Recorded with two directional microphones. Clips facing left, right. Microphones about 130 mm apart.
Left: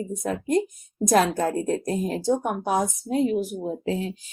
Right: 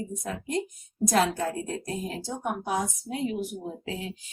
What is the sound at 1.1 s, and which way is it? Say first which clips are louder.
A woman's voice: left 5 dB; 45° left (ahead or behind).